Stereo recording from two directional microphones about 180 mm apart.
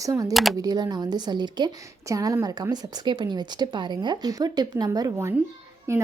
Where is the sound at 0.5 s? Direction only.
20° right (ahead or behind).